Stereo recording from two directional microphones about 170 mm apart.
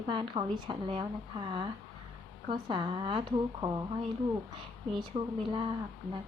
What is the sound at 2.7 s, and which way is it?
A woman's voice, 30° right (ahead or behind).